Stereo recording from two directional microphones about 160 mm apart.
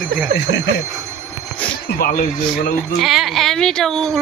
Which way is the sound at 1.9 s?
65° left (ahead or behind).